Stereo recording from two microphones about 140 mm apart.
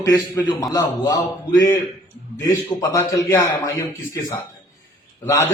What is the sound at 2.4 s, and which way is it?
A man's voice, 20° left (ahead or behind).